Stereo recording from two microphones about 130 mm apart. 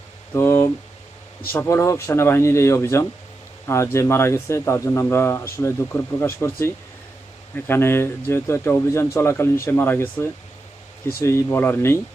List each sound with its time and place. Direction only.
0.3 s speech: 15° left (ahead or behind)